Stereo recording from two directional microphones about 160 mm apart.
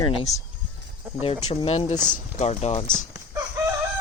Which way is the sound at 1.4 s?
40° left (ahead or behind).